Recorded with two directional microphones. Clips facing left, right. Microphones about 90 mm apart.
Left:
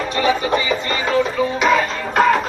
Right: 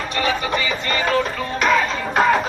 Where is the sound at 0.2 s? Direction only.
25° left (ahead or behind).